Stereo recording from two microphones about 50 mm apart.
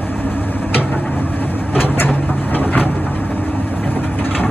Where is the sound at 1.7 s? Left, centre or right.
Left.